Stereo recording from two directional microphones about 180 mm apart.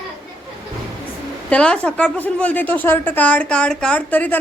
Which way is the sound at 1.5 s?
5° left (ahead or behind).